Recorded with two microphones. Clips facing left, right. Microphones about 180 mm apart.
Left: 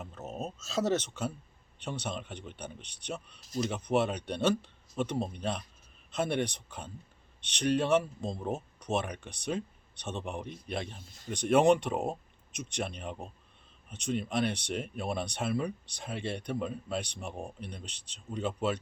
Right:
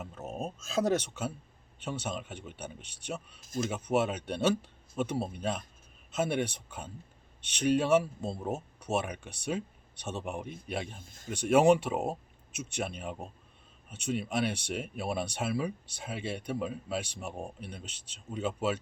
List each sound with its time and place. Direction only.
0.0 s speech: 10° right (ahead or behind)
3.4 s speech: 50° right (ahead or behind)
3.7 s speech: 5° right (ahead or behind)
10.9 s speech: 50° right (ahead or behind)
11.3 s speech: 10° right (ahead or behind)